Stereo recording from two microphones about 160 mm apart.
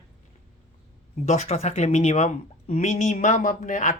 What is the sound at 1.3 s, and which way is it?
Speech, 45° left (ahead or behind).